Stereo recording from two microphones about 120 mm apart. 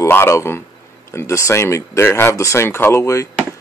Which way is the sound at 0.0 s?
20° left (ahead or behind).